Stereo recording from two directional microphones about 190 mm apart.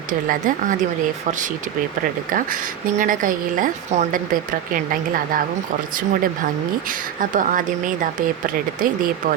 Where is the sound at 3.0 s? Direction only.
45° right (ahead or behind).